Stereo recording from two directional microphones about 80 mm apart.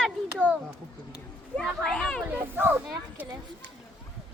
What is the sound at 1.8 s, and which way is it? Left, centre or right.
Speech, centre.